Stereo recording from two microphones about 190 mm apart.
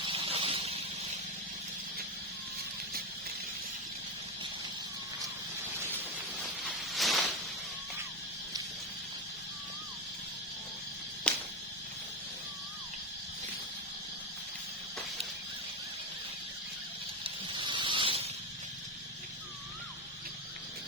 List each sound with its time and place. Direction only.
0.0 s vehicle: 30° right (ahead or behind)
6.7 s a sound: centre (ahead or behind)
11.3 s insect: 5° left (ahead or behind)
17.2 s snake: 25° right (ahead or behind)